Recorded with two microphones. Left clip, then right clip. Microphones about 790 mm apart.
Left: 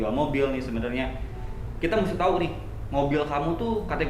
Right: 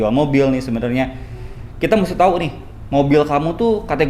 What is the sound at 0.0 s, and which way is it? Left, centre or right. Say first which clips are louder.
A man's voice: right 10 dB; right.